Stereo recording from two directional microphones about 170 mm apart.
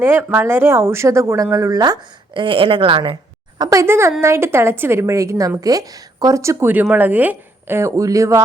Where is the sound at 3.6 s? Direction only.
20° right (ahead or behind).